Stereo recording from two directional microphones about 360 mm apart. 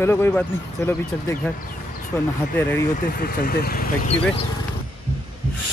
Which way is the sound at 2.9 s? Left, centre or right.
Left.